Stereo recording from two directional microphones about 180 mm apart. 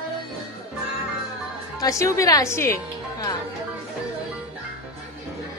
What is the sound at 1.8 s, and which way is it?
A woman's voice, 15° left (ahead or behind).